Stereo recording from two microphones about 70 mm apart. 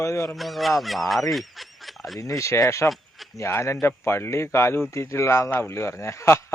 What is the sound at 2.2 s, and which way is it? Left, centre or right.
Speech, left.